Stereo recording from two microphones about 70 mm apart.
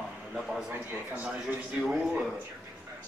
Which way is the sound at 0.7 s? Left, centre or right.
Right.